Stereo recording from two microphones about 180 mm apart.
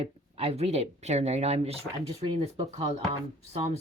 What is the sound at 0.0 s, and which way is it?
Speech, 35° right (ahead or behind).